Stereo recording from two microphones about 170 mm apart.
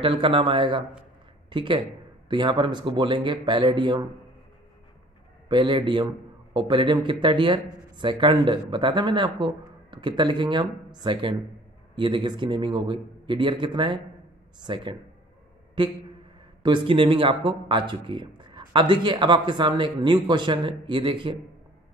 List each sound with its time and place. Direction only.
0.0 s a man's voice: 30° right (ahead or behind)
5.5 s speech: 25° right (ahead or behind)